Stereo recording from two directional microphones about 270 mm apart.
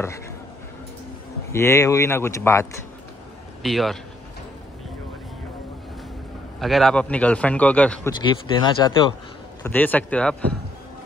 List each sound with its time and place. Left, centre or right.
1.5 s a man's voice: centre
6.6 s a man's voice: centre
8.2 s speech: centre